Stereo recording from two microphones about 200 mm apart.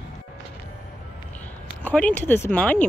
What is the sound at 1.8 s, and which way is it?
Speech, 5° left (ahead or behind).